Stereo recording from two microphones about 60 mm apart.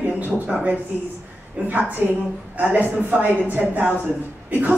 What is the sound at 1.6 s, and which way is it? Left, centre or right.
A woman's voice, right.